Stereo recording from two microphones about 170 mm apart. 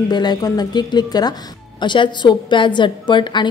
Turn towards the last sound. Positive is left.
turn(degrees=25)  # may be behind; listen again after turning